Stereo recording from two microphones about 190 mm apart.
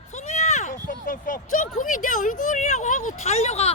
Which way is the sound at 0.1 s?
35° left (ahead or behind).